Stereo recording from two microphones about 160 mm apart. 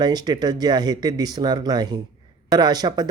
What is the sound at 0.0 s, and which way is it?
Speech, 25° right (ahead or behind).